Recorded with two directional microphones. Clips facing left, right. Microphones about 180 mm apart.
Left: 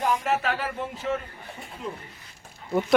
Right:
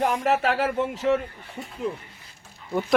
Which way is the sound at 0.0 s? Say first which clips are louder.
Right 3 dB; 65° right (ahead or behind).